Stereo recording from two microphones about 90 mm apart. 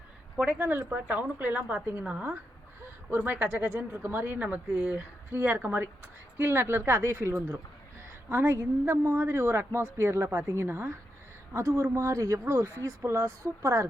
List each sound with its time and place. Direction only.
0.3 s speech: 20° right (ahead or behind); by 13.8 s 35° right (ahead or behind)